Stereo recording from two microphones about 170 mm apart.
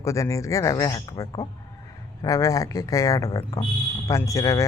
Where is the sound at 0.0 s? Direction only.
15° left (ahead or behind).